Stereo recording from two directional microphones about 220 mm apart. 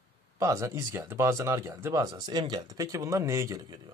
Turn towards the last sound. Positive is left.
turn(degrees=-20)  # may be behind; listen again after turning